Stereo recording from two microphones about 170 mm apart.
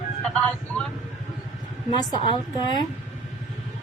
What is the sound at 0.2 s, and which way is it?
Vehicle, 5° left (ahead or behind).